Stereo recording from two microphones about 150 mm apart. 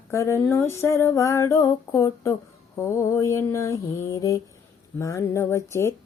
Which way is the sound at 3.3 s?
20° left (ahead or behind).